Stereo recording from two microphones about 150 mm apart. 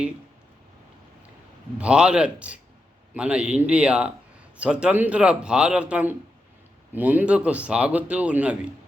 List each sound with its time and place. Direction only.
1.8 s speech: 5° right (ahead or behind)